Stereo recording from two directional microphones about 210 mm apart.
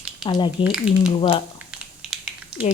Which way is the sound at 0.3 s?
20° left (ahead or behind).